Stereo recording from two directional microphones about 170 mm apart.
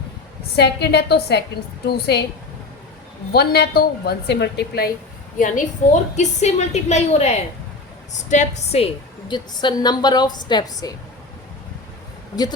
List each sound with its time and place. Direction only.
0.5 s a woman's voice: 75° left (ahead or behind)
3.3 s a woman's voice: 70° left (ahead or behind)
5.4 s a woman's voice: 50° left (ahead or behind)
9.3 s a woman's voice: 25° left (ahead or behind)